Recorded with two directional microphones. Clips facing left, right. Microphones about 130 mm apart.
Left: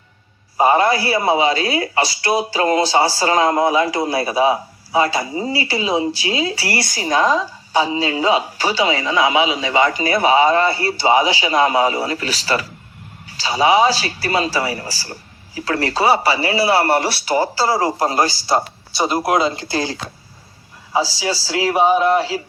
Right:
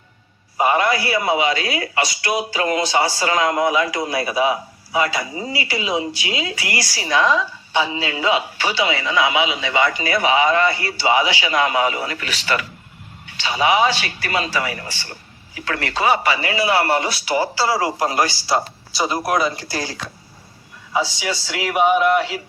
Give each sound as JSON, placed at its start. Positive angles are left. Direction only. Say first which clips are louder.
{"t": 0.5, "sound": "a man's voice", "louder": "left 3 dB", "side_deg": 30}
{"t": 6.8, "sound": "a man's voice", "louder": "left 1 dB", "side_deg": 45}
{"t": 18.9, "sound": "a man's voice", "louder": "left 3 dB", "side_deg": 25}